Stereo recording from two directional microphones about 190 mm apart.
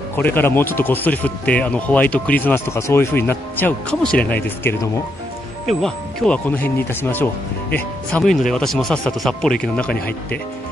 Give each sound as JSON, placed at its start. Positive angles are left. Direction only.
{"t": 0.1, "sound": "speech", "side_deg": 10}
{"t": 5.7, "sound": "speech", "side_deg": 0}